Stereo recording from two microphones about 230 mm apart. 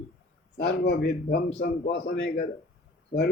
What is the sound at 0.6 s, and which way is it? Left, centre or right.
Speech, left.